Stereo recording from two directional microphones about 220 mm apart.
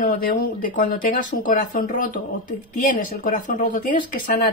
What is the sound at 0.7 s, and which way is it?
Speech, 40° left (ahead or behind).